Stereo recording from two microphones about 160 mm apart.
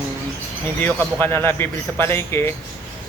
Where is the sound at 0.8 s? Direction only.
15° left (ahead or behind).